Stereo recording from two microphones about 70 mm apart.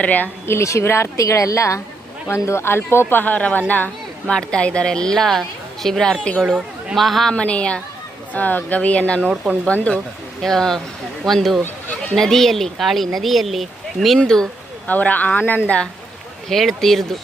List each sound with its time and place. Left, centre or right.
0.0 s speech: left
0.4 s a woman's voice: left
4.3 s speech: centre
6.4 s speech: centre
6.9 s speech: centre
7.3 s speech: centre
10.4 s speech: centre
11.6 s chatter: left
12.1 s speech: centre
14.8 s speech: left
15.6 s speech: centre